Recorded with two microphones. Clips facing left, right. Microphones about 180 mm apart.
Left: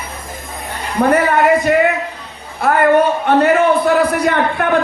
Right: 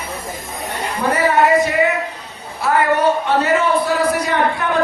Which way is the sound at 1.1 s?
55° left (ahead or behind).